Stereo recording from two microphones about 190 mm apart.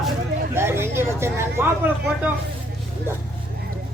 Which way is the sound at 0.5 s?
10° right (ahead or behind).